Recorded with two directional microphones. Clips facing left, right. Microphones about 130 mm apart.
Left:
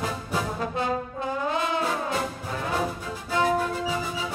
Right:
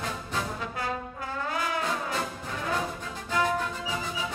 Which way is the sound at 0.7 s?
25° left (ahead or behind).